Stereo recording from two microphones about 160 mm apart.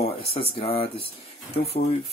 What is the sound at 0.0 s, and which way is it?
Speech, 40° left (ahead or behind).